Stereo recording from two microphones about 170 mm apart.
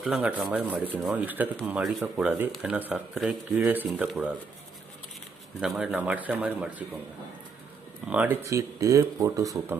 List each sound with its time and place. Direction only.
0.0 s speech: 5° right (ahead or behind)
5.5 s speech: 5° right (ahead or behind)
8.0 s speech: 10° right (ahead or behind)